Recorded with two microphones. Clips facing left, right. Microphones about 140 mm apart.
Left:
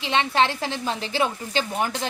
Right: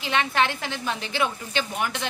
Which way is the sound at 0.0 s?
25° left (ahead or behind).